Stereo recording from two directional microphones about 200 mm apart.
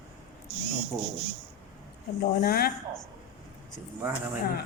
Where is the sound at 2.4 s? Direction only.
50° left (ahead or behind).